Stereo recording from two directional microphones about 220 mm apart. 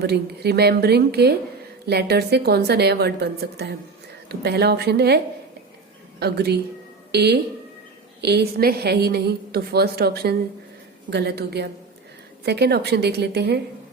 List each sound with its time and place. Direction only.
0.1 s a woman's voice: 45° right (ahead or behind)